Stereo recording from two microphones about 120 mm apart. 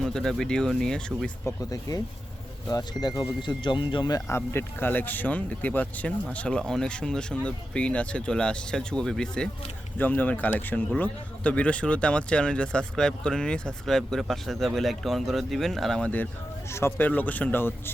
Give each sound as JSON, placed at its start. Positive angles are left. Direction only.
{"t": 0.0, "sound": "speech", "side_deg": 5}
{"t": 1.5, "sound": "speech", "side_deg": 30}
{"t": 4.3, "sound": "speech", "side_deg": 20}